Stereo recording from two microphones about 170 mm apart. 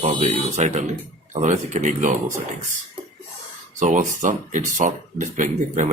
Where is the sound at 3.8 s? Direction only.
45° right (ahead or behind).